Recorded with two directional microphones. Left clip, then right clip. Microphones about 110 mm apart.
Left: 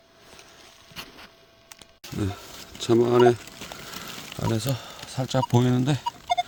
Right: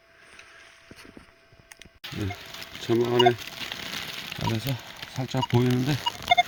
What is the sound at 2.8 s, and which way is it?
Speech, 15° left (ahead or behind).